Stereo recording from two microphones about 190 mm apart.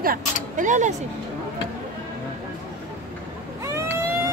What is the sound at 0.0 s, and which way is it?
Speech, 45° right (ahead or behind).